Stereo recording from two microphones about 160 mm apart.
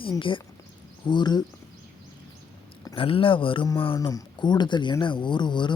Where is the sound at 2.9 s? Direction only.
35° left (ahead or behind).